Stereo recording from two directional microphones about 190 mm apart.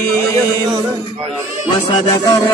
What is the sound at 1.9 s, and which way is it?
Music, 20° left (ahead or behind).